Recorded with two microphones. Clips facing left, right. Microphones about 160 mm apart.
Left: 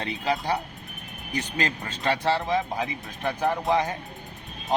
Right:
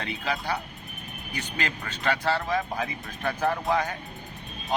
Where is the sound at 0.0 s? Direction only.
35° left (ahead or behind).